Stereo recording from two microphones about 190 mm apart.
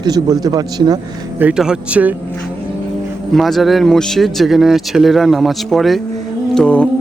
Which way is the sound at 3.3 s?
Centre (ahead or behind).